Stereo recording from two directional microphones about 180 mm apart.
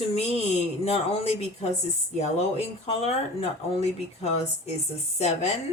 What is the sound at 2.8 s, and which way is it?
A woman's voice, 35° left (ahead or behind).